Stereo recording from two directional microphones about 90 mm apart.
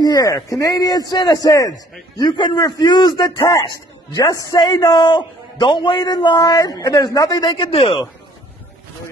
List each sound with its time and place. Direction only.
0.0 s a man's voice: 45° left (ahead or behind)
2.1 s a man's voice: 55° left (ahead or behind)
7.5 s speech: 85° left